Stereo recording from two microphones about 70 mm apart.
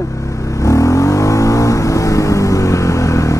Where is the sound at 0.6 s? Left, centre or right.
Left.